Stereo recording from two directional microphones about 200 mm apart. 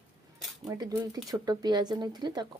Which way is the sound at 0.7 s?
15° right (ahead or behind).